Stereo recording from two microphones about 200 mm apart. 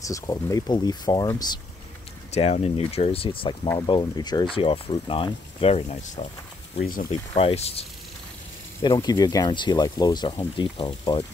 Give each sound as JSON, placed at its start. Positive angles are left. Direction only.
{"t": 0.0, "sound": "speech", "side_deg": 15}
{"t": 2.3, "sound": "speech", "side_deg": 35}
{"t": 3.6, "sound": "speech", "side_deg": 15}
{"t": 6.8, "sound": "speech", "side_deg": 45}
{"t": 7.3, "sound": "speech", "side_deg": 30}
{"t": 8.8, "sound": "speech", "side_deg": 15}